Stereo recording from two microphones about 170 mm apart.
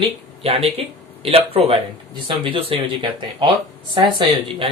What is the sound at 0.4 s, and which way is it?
Speech, 35° right (ahead or behind).